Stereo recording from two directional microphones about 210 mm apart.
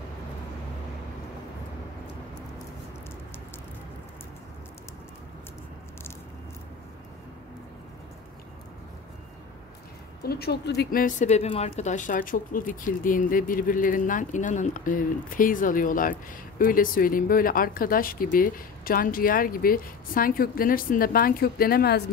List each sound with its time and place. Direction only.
10.2 s speech: 50° left (ahead or behind)